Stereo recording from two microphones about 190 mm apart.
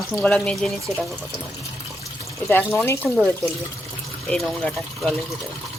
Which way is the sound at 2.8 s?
10° left (ahead or behind).